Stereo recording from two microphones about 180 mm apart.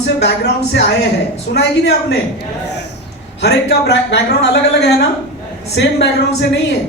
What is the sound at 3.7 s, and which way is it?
A man's voice, 75° left (ahead or behind).